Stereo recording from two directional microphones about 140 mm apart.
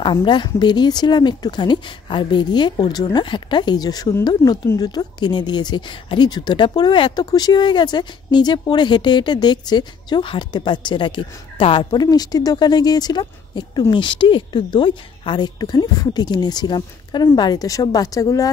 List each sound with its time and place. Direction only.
0.0 s speech: 35° left (ahead or behind)